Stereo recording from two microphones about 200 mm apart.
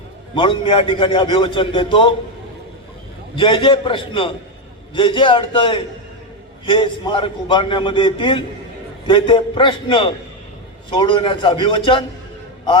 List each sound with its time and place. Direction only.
0.3 s a man's voice: 25° left (ahead or behind)
3.3 s a man's voice: 25° left (ahead or behind)